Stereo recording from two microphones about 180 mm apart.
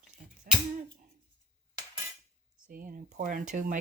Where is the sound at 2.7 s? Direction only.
50° right (ahead or behind).